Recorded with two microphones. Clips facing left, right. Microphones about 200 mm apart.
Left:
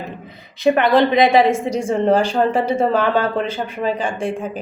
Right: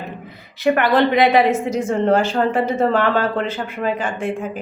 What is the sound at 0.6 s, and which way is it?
Speech, 15° left (ahead or behind).